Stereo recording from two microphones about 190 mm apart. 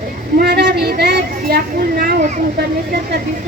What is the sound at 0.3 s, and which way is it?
A woman's voice, 55° right (ahead or behind).